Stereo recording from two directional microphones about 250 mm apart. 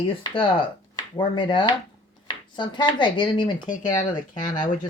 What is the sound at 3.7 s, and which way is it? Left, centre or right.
Speech, left.